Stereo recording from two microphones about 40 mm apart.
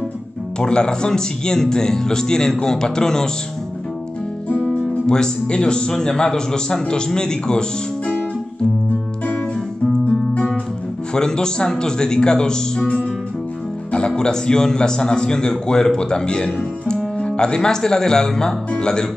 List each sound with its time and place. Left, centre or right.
0.6 s speech: left
4.7 s a man's voice: centre
11.1 s speech: centre
13.9 s a man's voice: left